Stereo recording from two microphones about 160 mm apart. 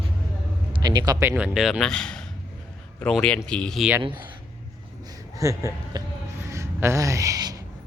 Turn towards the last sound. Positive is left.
turn(degrees=-25)  # may be behind; listen again after turning